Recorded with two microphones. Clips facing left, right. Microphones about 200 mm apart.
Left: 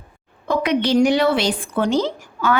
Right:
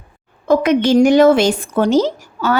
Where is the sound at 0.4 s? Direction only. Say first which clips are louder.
Right 6 dB; 45° right (ahead or behind).